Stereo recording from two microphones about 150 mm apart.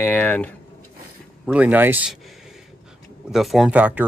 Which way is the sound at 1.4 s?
10° right (ahead or behind).